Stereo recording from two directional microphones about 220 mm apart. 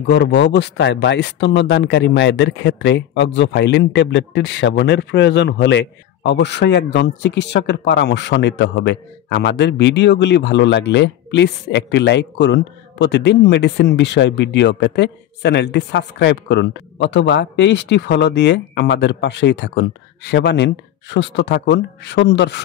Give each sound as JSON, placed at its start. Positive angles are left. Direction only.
{"t": 0.0, "sound": "speech", "side_deg": 50}